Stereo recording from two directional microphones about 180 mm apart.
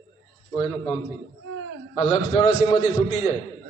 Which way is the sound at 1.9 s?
30° left (ahead or behind).